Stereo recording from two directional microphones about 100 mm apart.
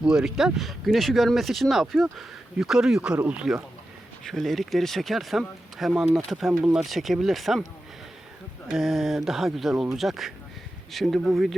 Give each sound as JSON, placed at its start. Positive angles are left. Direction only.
{"t": 0.0, "sound": "speech", "side_deg": -10}
{"t": 4.2, "sound": "speech", "side_deg": 0}
{"t": 8.7, "sound": "speech", "side_deg": 0}